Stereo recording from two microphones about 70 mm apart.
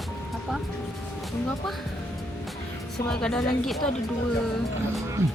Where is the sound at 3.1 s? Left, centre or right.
Centre.